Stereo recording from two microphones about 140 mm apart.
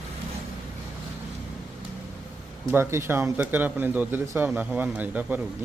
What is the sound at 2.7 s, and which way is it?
Speech, 15° right (ahead or behind).